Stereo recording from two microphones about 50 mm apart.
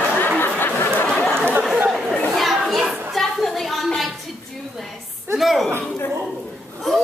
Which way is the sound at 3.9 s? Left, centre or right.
Centre.